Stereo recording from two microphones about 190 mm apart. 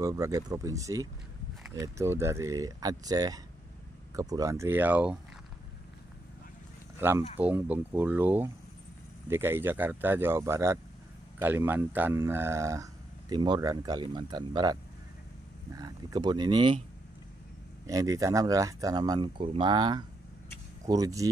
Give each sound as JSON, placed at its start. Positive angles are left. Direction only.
{"t": 0.0, "sound": "speech", "side_deg": -15}
{"t": 7.0, "sound": "speech", "side_deg": -10}
{"t": 17.8, "sound": "speech", "side_deg": -15}